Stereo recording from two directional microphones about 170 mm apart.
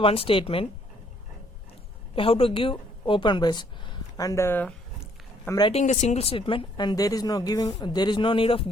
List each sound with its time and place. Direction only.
0.0 s speech: 35° left (ahead or behind)
2.1 s speech: 35° left (ahead or behind); by 4.7 s 10° left (ahead or behind)
5.5 s speech: 25° left (ahead or behind)
5.7 s speech: 45° left (ahead or behind)